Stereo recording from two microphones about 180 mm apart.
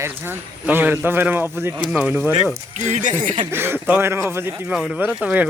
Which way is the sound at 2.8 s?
40° right (ahead or behind).